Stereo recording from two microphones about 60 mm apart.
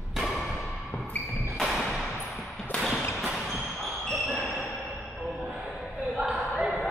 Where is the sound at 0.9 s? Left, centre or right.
Left.